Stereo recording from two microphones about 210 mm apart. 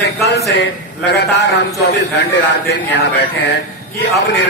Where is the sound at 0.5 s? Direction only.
55° left (ahead or behind).